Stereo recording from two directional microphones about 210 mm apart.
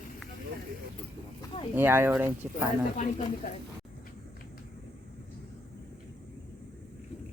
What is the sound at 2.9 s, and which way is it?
Speech, 35° left (ahead or behind).